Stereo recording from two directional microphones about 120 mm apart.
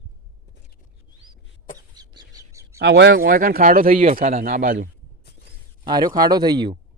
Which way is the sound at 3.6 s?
70° right (ahead or behind).